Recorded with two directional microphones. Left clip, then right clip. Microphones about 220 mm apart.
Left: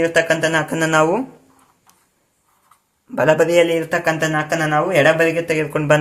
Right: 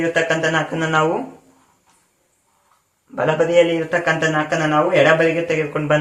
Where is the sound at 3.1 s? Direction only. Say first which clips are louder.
Left 2 dB; 50° left (ahead or behind).